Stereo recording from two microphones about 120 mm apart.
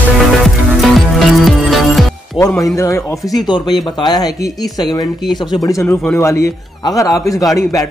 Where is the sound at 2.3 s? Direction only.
25° left (ahead or behind).